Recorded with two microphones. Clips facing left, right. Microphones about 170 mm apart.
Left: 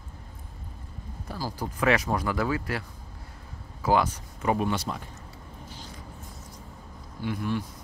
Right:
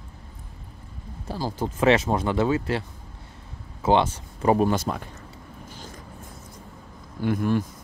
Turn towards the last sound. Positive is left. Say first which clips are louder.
# right 6 dB
turn(degrees=-45)  # may be behind; listen again after turning